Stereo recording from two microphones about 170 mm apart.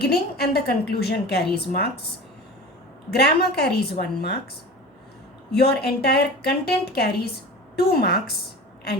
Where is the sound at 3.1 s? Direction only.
70° left (ahead or behind).